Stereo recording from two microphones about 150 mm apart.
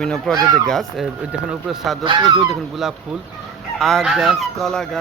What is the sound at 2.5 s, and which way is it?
Speech, 5° right (ahead or behind).